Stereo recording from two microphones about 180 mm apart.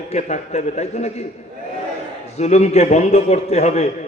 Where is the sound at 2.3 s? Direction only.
40° left (ahead or behind).